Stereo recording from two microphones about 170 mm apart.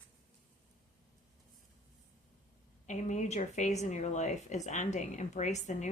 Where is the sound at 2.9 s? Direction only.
45° left (ahead or behind).